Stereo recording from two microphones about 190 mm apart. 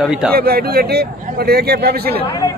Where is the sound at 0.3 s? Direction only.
55° right (ahead or behind).